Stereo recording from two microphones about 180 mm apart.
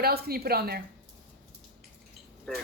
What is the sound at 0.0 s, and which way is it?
Speech, 60° right (ahead or behind).